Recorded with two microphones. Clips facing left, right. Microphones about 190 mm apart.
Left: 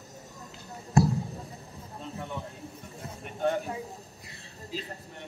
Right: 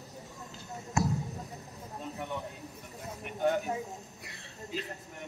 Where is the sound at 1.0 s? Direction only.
30° left (ahead or behind).